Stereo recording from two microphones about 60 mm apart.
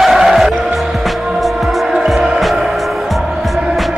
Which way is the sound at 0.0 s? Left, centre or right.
Centre.